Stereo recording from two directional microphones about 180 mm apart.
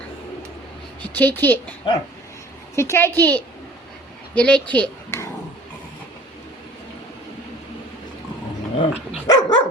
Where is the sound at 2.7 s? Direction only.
15° left (ahead or behind).